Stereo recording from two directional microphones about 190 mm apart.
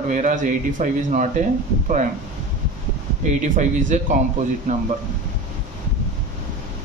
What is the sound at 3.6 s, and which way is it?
Speech, 40° right (ahead or behind).